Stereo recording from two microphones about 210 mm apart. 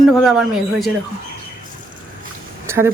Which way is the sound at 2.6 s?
10° right (ahead or behind).